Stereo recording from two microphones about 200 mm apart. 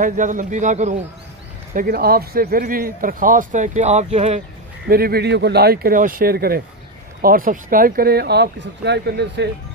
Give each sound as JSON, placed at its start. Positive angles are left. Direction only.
{"t": 0.0, "sound": "speech", "side_deg": -40}
{"t": 1.8, "sound": "a man's voice", "side_deg": -50}
{"t": 4.8, "sound": "a man's voice", "side_deg": -50}